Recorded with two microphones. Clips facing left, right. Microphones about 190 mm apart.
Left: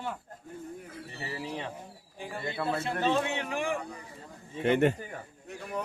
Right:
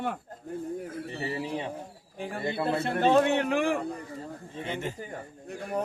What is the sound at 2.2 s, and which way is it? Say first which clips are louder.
Speech: right 4 dB; 60° right (ahead or behind).